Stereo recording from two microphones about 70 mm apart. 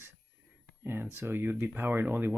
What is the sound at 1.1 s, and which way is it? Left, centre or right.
Speech, right.